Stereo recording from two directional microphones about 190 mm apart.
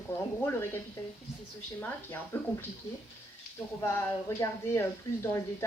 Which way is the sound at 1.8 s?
10° left (ahead or behind).